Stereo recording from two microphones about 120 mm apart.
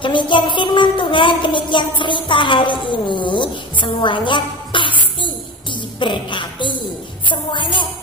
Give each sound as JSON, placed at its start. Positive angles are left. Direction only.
{"t": 0.0, "sound": "a woman's voice", "side_deg": 40}